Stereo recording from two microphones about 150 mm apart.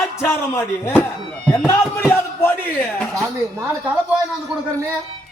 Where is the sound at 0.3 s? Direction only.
15° left (ahead or behind).